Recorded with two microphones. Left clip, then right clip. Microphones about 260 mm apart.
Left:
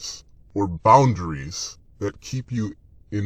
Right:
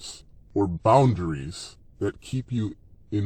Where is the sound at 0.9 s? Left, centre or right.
Left.